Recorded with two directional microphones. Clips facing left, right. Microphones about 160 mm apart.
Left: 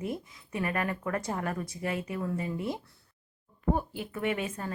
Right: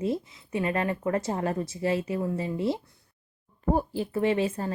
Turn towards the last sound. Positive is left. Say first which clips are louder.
# right 6 dB
turn(degrees=-30)  # may be behind; listen again after turning